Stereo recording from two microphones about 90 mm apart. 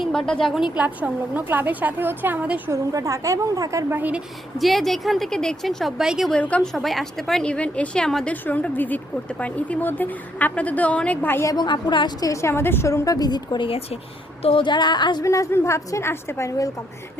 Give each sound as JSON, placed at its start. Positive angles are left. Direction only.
{"t": 0.0, "sound": "a woman's voice", "side_deg": 5}
{"t": 0.8, "sound": "a woman's voice", "side_deg": -15}
{"t": 2.6, "sound": "a woman's voice", "side_deg": -35}
{"t": 3.9, "sound": "a woman's voice", "side_deg": -20}
{"t": 4.5, "sound": "a woman's voice", "side_deg": 0}
{"t": 6.3, "sound": "a woman's voice", "side_deg": 10}
{"t": 6.7, "sound": "a woman's voice", "side_deg": 0}
{"t": 11.4, "sound": "a woman's voice", "side_deg": 50}
{"t": 12.2, "sound": "a woman's voice", "side_deg": 35}
{"t": 13.7, "sound": "speech", "side_deg": 90}
{"t": 14.4, "sound": "a woman's voice", "side_deg": 75}
{"t": 15.2, "sound": "a woman's voice", "side_deg": 35}